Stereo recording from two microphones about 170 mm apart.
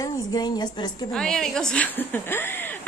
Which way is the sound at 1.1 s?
5° left (ahead or behind).